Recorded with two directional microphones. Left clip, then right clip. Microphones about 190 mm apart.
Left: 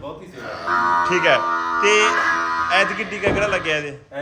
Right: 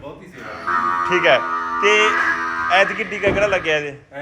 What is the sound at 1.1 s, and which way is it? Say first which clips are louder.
Speech: right 2 dB; 15° left (ahead or behind).